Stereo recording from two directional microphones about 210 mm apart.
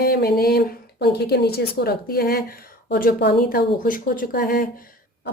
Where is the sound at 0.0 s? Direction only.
50° left (ahead or behind).